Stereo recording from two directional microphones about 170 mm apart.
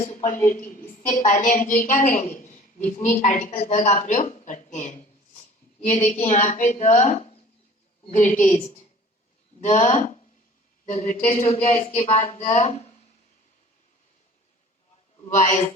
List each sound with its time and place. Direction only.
1.0 s a woman's voice: 45° left (ahead or behind)
15.3 s a woman's voice: 45° left (ahead or behind)